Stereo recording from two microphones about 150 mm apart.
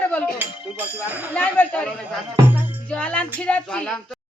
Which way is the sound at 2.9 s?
10° left (ahead or behind).